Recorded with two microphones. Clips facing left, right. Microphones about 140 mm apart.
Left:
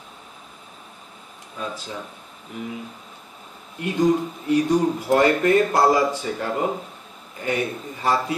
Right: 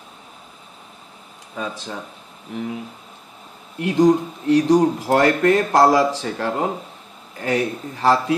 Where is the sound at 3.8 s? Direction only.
85° right.